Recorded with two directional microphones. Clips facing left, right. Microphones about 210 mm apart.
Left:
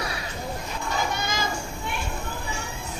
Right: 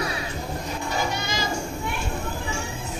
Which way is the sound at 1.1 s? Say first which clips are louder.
Even; 50° left (ahead or behind).